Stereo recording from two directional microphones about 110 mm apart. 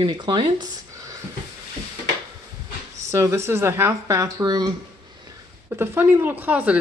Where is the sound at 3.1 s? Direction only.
25° right (ahead or behind).